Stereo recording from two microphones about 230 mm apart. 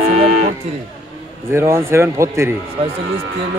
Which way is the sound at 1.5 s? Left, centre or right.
Centre.